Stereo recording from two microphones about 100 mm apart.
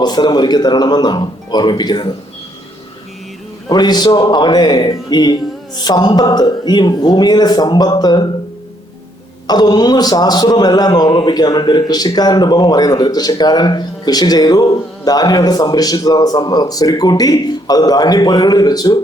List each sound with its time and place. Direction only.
0.0 s a man's voice: 45° left (ahead or behind)
3.7 s a man's voice: 45° left (ahead or behind)
9.5 s a man's voice: 45° left (ahead or behind)